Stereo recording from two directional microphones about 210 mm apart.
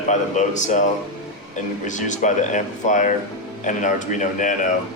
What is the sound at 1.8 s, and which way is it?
Speech, 35° left (ahead or behind).